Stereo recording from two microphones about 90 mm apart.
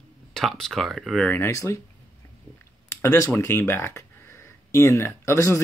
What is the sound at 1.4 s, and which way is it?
Speech, 35° left (ahead or behind).